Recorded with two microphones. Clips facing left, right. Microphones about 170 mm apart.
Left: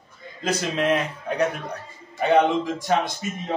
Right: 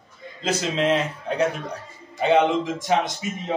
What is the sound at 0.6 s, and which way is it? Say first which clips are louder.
A man's voice: right 1 dB; 25° right (ahead or behind).